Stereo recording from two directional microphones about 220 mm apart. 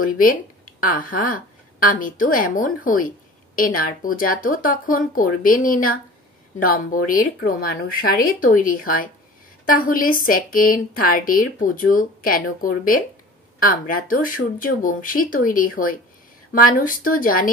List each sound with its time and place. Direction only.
0.0 s a woman's voice: 40° left (ahead or behind)